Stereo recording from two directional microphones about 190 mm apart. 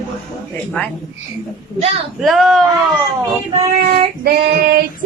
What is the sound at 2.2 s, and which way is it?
Speech, centre (ahead or behind).